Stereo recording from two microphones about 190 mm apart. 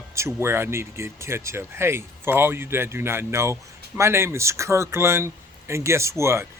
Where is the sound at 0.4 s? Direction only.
15° right (ahead or behind).